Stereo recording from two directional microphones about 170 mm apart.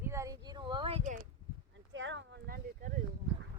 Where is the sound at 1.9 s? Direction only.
90° right; by 2.9 s 60° right (ahead or behind).